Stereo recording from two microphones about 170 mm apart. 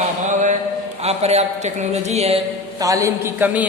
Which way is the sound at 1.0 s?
40° right (ahead or behind).